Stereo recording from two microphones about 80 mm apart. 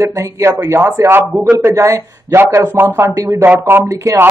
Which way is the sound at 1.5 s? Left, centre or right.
Right.